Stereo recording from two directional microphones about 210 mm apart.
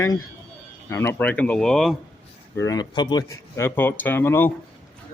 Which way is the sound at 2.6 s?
20° left (ahead or behind).